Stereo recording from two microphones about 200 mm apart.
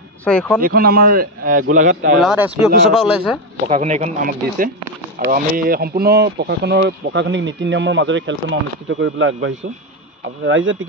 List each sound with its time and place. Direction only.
0.2 s speech: 5° left (ahead or behind)
0.6 s a man's voice: 45° right (ahead or behind)
2.1 s speech: 5° right (ahead or behind)
3.6 s speech: 35° right (ahead or behind); by 10.9 s 80° right